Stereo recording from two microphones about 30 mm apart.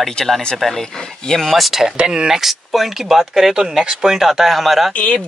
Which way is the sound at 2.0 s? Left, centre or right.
Right.